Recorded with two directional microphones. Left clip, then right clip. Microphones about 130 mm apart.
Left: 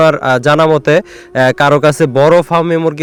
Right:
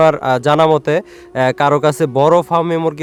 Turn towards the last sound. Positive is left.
turn(degrees=20)  # may be behind; listen again after turning